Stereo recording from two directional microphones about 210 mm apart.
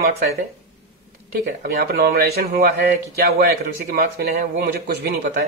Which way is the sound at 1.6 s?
45° right (ahead or behind).